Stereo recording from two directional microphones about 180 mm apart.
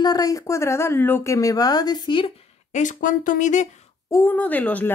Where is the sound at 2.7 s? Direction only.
45° left (ahead or behind).